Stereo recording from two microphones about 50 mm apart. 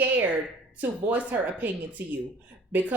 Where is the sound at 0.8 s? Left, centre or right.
Right.